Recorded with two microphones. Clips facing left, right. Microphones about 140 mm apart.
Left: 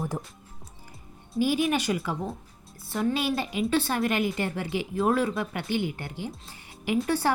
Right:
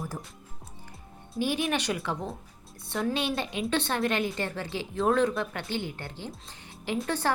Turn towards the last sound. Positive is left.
turn(degrees=10)  # may be behind; listen again after turning